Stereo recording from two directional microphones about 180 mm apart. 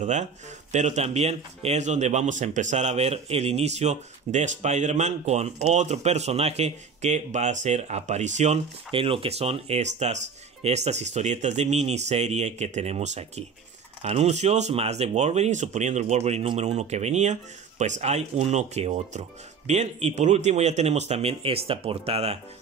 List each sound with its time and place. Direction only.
0.0 s speech: 40° right (ahead or behind)